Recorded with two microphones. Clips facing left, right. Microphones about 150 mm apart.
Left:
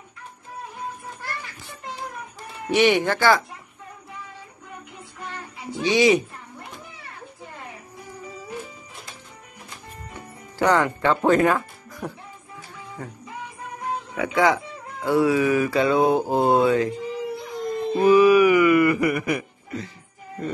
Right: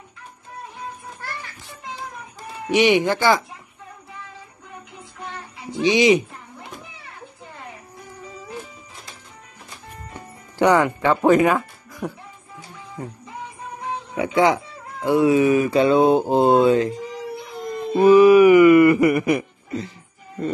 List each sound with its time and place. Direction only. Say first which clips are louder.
2.7 s speech: right 2 dB; 15° right (ahead or behind)
5.8 s speech: right 2 dB; 15° right (ahead or behind)
10.6 s speech: right 3 dB; 15° right (ahead or behind)
12.0 s speech: right 3 dB; 5° right (ahead or behind)
13.0 s speech: right 3 dB; 20° right (ahead or behind)
17.9 s speech: right 4 dB; 30° right (ahead or behind)